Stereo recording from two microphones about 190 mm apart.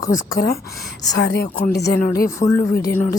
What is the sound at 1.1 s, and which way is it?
Speech, 65° left (ahead or behind).